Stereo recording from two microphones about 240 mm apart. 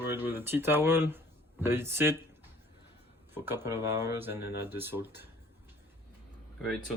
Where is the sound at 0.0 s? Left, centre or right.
Centre.